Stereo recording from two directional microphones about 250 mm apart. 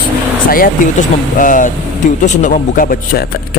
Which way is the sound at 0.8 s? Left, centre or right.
Left.